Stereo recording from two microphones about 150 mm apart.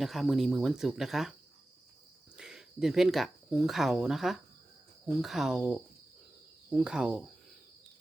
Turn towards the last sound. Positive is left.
turn(degrees=-5)  # may be behind; listen again after turning